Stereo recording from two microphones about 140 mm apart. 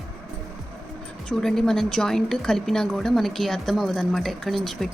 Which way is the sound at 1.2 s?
5° left (ahead or behind).